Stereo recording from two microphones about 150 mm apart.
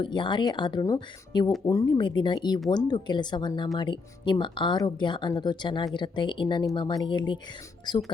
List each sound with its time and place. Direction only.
0.0 s speech: 30° left (ahead or behind)